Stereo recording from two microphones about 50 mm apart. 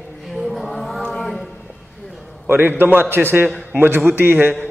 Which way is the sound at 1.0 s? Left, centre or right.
Centre.